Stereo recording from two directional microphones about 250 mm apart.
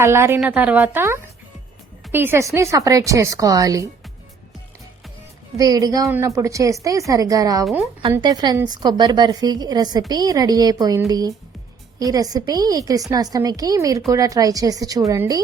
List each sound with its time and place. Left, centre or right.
0.0 s a woman's voice: centre
5.5 s a woman's voice: centre